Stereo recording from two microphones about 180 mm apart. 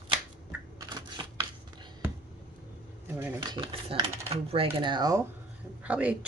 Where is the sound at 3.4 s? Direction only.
25° right (ahead or behind).